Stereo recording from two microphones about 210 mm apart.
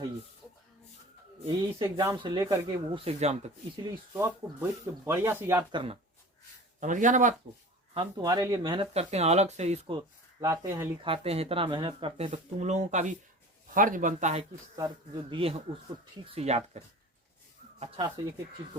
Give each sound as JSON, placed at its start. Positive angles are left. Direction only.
{"t": 1.8, "sound": "speech", "side_deg": -15}
{"t": 4.1, "sound": "speech", "side_deg": -10}
{"t": 5.7, "sound": "speech", "side_deg": -25}
{"t": 6.7, "sound": "speech", "side_deg": -35}
{"t": 7.9, "sound": "speech", "side_deg": -20}
{"t": 10.4, "sound": "speech", "side_deg": -15}
{"t": 11.0, "sound": "speech", "side_deg": -25}
{"t": 14.8, "sound": "speech", "side_deg": -20}